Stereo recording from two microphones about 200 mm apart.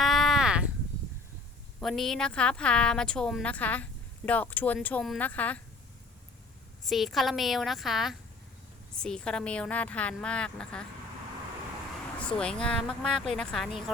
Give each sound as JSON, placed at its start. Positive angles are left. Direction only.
{"t": 0.0, "sound": "a sound", "side_deg": 0}
{"t": 1.8, "sound": "speech", "side_deg": 0}
{"t": 6.8, "sound": "speech", "side_deg": 0}
{"t": 12.4, "sound": "speech", "side_deg": 5}